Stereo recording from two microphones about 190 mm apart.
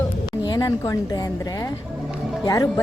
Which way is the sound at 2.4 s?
20° left (ahead or behind).